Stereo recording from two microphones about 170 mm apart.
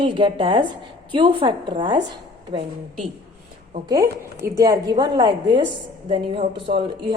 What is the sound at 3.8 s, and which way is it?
A woman's voice, 20° right (ahead or behind).